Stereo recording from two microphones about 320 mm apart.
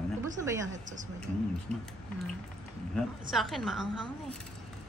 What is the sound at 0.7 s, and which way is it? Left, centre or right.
Speech, right.